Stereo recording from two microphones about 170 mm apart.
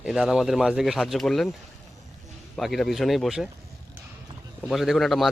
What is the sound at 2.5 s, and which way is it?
Speech, centre (ahead or behind).